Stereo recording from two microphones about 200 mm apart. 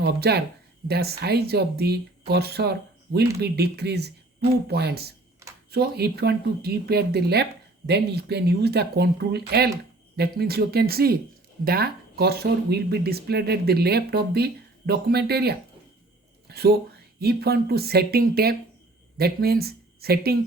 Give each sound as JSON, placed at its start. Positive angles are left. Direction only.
{"t": 0.0, "sound": "speech", "side_deg": -55}